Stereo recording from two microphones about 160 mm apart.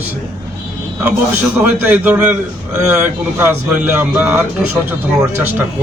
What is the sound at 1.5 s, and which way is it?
A man's voice, 10° right (ahead or behind).